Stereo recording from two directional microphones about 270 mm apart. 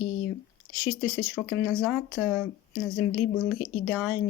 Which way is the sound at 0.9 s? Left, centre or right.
Left.